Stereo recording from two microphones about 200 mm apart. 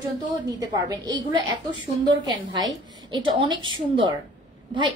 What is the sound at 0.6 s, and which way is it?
A woman's voice, 20° right (ahead or behind).